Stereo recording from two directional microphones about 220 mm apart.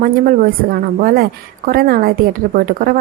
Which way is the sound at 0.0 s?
40° right (ahead or behind).